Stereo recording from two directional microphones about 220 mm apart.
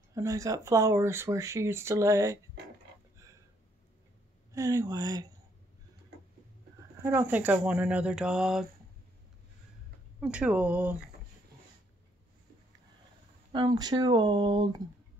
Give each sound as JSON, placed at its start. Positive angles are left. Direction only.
{"t": 0.1, "sound": "speech", "side_deg": -15}
{"t": 4.5, "sound": "speech", "side_deg": -15}
{"t": 7.0, "sound": "speech", "side_deg": -10}
{"t": 10.2, "sound": "speech", "side_deg": -5}
{"t": 13.5, "sound": "speech", "side_deg": -20}